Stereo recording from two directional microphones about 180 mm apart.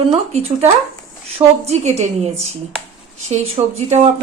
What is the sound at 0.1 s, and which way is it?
Speech, 35° right (ahead or behind).